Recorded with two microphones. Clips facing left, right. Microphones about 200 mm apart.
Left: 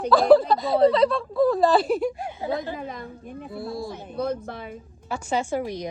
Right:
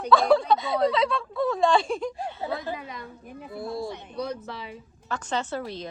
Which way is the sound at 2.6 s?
45° left (ahead or behind).